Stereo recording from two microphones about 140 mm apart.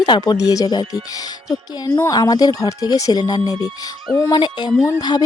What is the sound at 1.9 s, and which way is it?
Speech, 25° left (ahead or behind).